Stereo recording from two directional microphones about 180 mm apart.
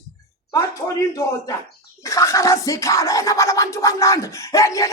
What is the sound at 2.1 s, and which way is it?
Scratching, 20° left (ahead or behind).